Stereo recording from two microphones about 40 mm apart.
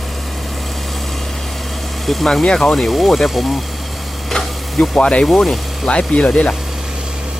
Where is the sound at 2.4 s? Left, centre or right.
Centre.